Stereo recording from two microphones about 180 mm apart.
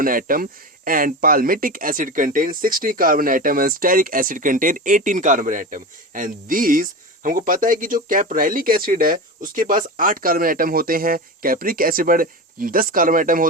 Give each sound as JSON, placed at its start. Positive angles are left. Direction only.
{"t": 0.0, "sound": "speech", "side_deg": -50}